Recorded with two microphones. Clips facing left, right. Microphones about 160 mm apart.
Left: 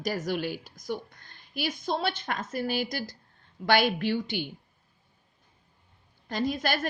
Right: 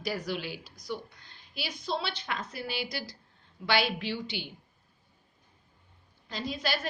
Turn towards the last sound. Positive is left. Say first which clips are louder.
# left 5 dB
turn(degrees=50)  # may be behind; listen again after turning